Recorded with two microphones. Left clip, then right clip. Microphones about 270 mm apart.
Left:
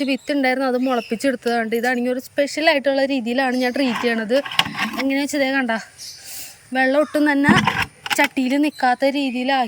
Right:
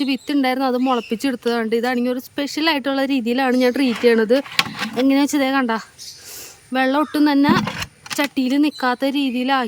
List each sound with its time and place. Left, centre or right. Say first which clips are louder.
0.0 s speech: even; centre